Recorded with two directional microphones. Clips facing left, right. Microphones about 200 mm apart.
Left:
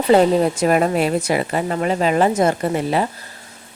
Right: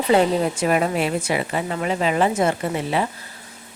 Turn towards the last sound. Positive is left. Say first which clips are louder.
# left 4 dB
turn(degrees=40)  # may be behind; listen again after turning